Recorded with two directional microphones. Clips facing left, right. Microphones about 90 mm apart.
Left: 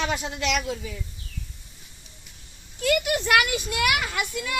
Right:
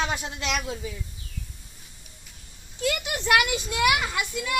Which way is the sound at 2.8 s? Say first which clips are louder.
Left 5 dB; 15° right (ahead or behind).